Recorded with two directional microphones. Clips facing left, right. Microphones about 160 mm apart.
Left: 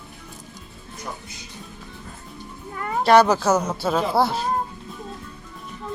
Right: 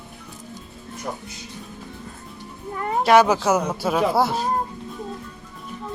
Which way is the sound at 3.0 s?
5° right (ahead or behind).